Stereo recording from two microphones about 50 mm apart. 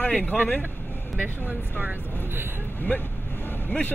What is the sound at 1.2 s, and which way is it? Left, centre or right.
Speech, right.